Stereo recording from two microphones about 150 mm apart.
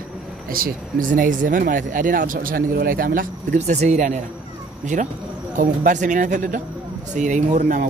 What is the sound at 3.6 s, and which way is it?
Speech, 50° right (ahead or behind).